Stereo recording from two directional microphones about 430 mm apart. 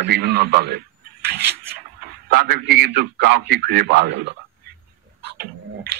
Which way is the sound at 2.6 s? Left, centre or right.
Right.